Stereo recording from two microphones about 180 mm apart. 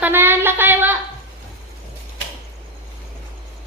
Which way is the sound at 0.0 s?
10° right (ahead or behind).